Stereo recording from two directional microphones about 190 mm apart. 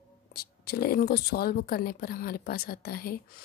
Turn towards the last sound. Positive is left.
turn(degrees=50)  # may be behind; listen again after turning